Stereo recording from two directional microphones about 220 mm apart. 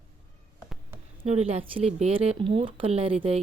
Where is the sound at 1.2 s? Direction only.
25° right (ahead or behind).